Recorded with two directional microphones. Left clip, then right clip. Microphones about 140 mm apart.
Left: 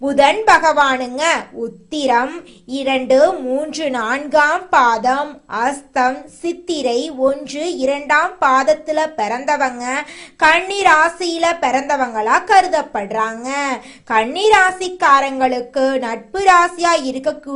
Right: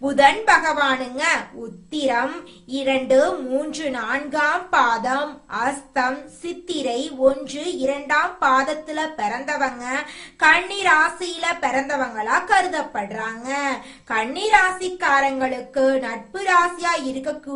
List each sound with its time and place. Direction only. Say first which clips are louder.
0.0 s a woman's voice: left 3 dB; 35° left (ahead or behind); by 17.0 s 55° left (ahead or behind)